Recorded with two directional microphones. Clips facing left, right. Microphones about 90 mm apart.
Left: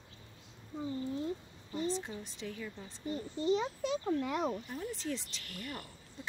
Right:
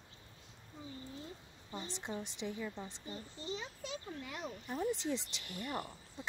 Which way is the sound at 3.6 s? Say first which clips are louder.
Left 10 dB; 70° left (ahead or behind).